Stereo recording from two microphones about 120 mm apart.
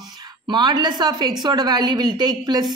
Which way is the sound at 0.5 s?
40° right (ahead or behind).